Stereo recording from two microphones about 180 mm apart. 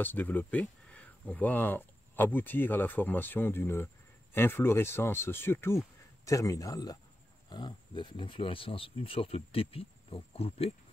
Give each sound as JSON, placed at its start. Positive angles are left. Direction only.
{"t": 0.0, "sound": "a man's voice", "side_deg": 10}